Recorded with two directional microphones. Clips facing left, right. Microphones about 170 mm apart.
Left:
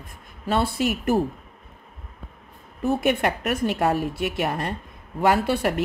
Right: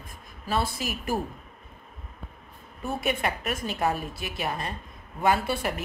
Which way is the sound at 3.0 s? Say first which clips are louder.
Left 6 dB; 65° left (ahead or behind).